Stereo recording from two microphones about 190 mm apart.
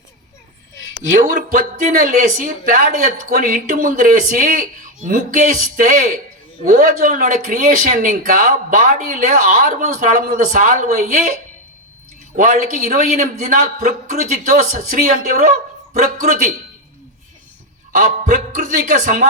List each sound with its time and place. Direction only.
1.1 s speech: 45° right (ahead or behind)
12.9 s speech: 40° right (ahead or behind)
17.9 s speech: 40° right (ahead or behind)